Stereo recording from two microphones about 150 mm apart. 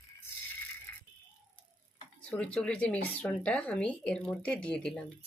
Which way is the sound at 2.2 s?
10° left (ahead or behind).